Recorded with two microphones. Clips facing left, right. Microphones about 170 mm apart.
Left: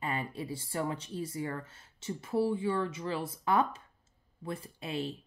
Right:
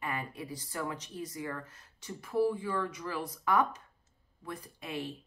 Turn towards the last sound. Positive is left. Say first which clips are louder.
# left 3 dB
turn(degrees=30)  # may be behind; listen again after turning